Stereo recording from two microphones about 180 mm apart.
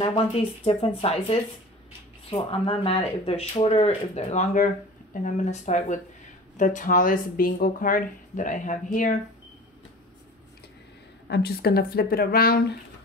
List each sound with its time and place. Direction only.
0.7 s speech: 35° left (ahead or behind)
11.2 s speech: 65° left (ahead or behind)